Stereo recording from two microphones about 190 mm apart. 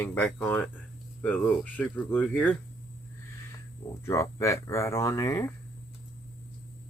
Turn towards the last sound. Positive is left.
turn(degrees=15)  # may be behind; listen again after turning